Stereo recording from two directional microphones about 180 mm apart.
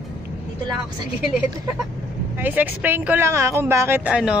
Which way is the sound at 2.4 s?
10° right (ahead or behind).